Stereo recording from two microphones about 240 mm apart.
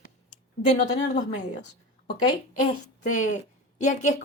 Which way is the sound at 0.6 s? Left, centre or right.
Left.